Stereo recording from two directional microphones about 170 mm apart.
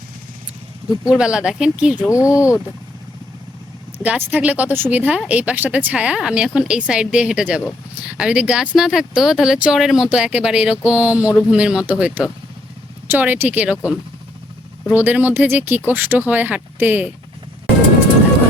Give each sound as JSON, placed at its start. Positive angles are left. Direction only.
{"t": 1.1, "sound": "speech", "side_deg": -5}
{"t": 2.0, "sound": "speech", "side_deg": 20}
{"t": 4.0, "sound": "a woman's voice", "side_deg": -10}
{"t": 14.9, "sound": "a woman's voice", "side_deg": -10}